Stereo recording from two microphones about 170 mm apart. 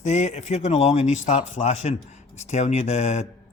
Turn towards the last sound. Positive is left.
turn(degrees=40)  # may be behind; listen again after turning